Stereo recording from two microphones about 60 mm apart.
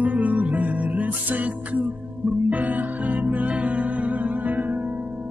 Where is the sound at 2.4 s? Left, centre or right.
Right.